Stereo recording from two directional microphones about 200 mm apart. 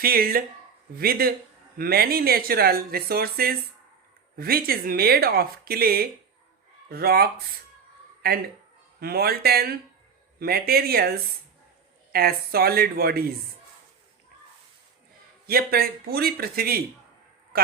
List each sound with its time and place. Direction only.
0.0 s speech: 50° right (ahead or behind)
15.4 s speech: 50° right (ahead or behind)